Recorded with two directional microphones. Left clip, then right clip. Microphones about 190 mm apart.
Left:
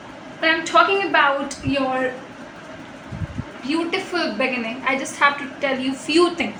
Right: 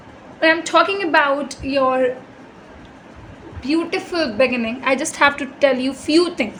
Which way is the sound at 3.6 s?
50° right (ahead or behind).